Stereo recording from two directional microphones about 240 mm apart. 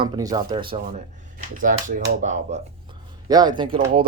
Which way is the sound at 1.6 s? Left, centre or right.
Right.